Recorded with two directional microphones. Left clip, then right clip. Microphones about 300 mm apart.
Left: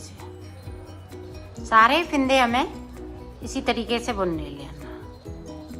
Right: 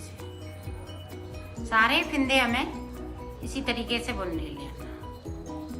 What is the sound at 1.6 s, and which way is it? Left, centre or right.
A woman's voice, centre.